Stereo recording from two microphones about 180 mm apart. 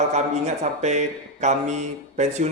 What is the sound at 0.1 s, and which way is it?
Speech, 40° right (ahead or behind).